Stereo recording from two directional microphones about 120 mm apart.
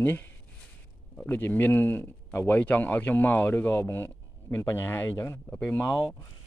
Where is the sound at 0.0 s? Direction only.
15° left (ahead or behind).